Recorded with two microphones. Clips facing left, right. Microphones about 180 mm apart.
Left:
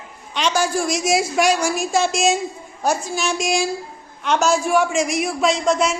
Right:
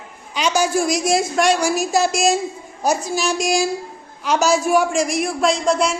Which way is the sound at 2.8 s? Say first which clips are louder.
Right 1 dB; 40° right (ahead or behind).